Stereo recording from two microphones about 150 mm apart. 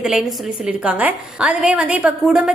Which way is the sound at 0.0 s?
5° right (ahead or behind).